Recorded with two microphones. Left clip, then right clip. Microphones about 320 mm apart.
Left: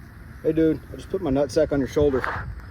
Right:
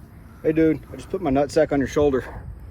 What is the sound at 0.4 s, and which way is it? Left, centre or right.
Speech, right.